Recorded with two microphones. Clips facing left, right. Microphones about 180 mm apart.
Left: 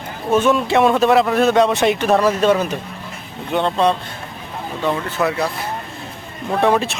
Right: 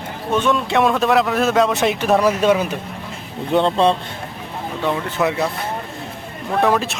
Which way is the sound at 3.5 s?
30° right (ahead or behind).